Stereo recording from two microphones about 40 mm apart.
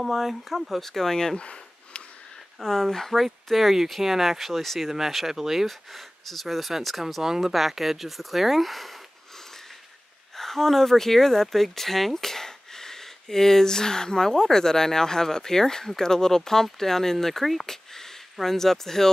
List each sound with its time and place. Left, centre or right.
0.0 s speech: centre
1.4 s a sound: left
2.6 s speech: centre
10.3 s speech: centre